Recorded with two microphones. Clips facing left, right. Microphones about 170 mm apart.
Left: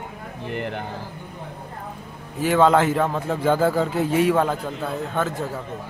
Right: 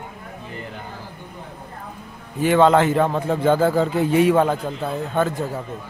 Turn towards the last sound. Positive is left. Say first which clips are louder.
# right 3 dB
turn(degrees=0)  # may be behind; listen again after turning